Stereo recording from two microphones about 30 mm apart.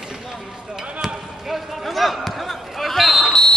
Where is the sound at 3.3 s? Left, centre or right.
Left.